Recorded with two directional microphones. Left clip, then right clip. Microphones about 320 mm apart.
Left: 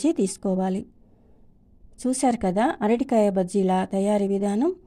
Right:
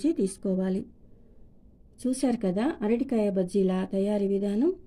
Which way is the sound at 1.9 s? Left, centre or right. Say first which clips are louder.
Left 5 dB; left.